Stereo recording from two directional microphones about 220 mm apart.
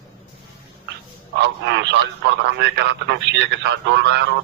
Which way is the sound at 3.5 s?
55° right (ahead or behind).